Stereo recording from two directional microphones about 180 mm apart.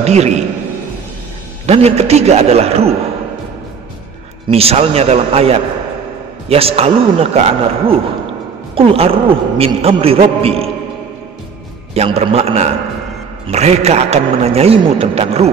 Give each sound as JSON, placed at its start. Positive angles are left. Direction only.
{"t": 0.0, "sound": "a man's voice", "side_deg": -40}
{"t": 1.7, "sound": "a man's voice", "side_deg": -35}
{"t": 4.5, "sound": "a man's voice", "side_deg": -35}
{"t": 11.9, "sound": "a man's voice", "side_deg": -35}